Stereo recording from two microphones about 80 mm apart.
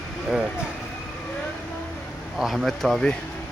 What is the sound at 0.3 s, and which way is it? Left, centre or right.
Speech, centre.